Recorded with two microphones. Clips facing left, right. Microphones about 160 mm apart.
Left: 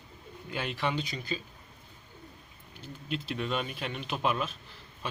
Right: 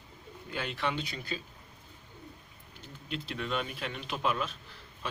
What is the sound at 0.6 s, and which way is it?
Speech, 5° left (ahead or behind).